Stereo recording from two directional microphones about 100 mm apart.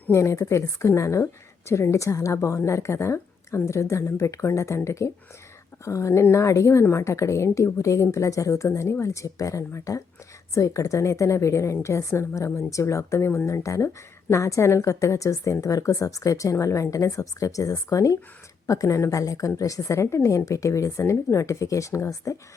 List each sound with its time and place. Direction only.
0.1 s a woman's voice: 30° left (ahead or behind)